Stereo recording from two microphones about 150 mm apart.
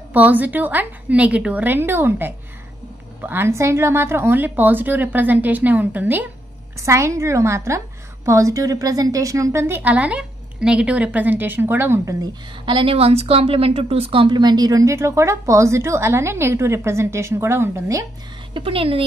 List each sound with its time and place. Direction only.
0.1 s a woman's voice: 10° right (ahead or behind)
12.6 s a woman's voice: 35° right (ahead or behind); by 18.0 s 20° right (ahead or behind)
18.5 s a woman's voice: 35° right (ahead or behind)